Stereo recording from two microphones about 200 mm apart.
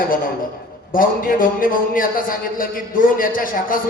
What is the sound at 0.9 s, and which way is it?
A man's voice, 45° left (ahead or behind).